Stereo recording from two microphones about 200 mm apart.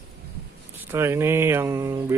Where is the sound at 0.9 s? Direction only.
10° right (ahead or behind).